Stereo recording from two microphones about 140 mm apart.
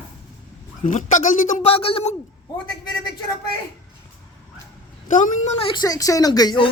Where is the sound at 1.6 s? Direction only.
40° left (ahead or behind).